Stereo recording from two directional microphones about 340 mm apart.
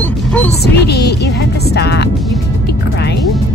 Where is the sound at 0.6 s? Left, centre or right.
Left.